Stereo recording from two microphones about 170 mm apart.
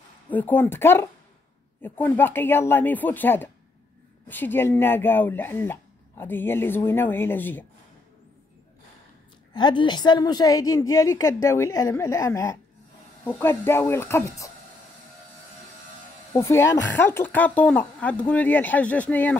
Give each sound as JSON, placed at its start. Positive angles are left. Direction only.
{"t": 0.3, "sound": "speech", "side_deg": 10}
{"t": 9.5, "sound": "a woman's voice", "side_deg": 30}
{"t": 16.3, "sound": "speech", "side_deg": 15}